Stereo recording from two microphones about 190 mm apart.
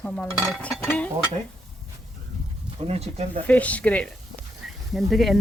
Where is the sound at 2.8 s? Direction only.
35° right (ahead or behind).